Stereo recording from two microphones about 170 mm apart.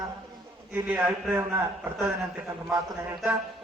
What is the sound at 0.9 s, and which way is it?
Speech, 10° right (ahead or behind).